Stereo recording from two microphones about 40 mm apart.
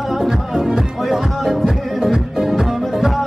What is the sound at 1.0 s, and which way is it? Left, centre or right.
Music, centre.